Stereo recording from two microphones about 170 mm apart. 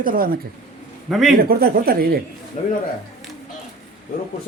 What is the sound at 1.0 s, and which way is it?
Speech, centre (ahead or behind).